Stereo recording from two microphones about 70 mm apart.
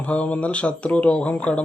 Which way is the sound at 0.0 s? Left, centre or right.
Centre.